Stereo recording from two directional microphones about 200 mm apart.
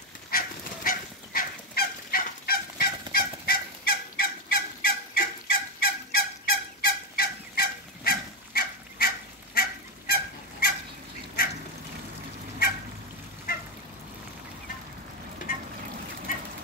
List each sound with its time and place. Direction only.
0.3 s fowl: 45° left (ahead or behind)
11.4 s duck: 45° left (ahead or behind)
13.5 s a sound: 45° left (ahead or behind)